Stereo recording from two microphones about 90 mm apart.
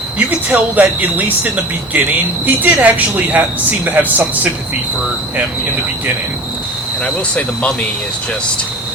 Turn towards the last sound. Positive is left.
turn(degrees=15)  # may be behind; listen again after turning